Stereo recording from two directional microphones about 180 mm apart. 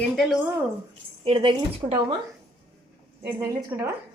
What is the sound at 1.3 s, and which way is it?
Speech, 25° right (ahead or behind).